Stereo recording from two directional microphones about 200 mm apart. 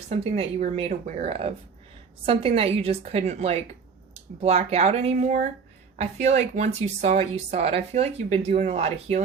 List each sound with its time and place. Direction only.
0.1 s a woman's voice: 30° right (ahead or behind)